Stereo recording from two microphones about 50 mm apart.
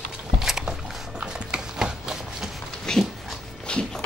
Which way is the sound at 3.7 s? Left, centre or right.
Left.